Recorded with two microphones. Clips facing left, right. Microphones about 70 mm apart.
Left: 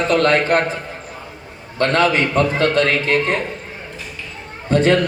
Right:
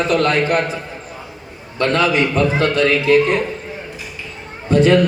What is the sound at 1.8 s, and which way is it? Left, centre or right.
A man's voice, left.